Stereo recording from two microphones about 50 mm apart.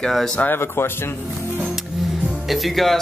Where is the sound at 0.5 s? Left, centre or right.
Left.